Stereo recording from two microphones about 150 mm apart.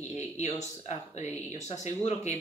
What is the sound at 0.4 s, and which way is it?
Speech, 45° left (ahead or behind).